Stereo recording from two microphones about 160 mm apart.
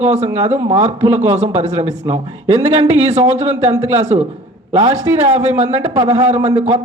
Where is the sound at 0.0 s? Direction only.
45° right (ahead or behind).